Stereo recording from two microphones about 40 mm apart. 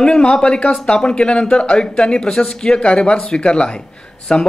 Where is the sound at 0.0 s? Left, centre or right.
Centre.